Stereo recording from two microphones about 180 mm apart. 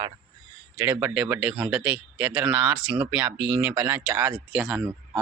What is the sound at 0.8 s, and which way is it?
Speech, 10° right (ahead or behind).